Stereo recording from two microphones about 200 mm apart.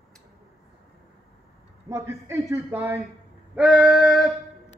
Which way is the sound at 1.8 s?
15° right (ahead or behind).